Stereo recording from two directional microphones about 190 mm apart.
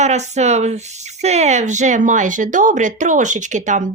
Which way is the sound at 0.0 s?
35° right (ahead or behind).